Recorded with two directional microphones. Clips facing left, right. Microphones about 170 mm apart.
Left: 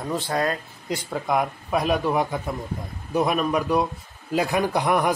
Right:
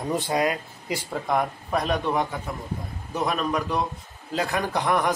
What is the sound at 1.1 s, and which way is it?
A man's voice, 5° left (ahead or behind).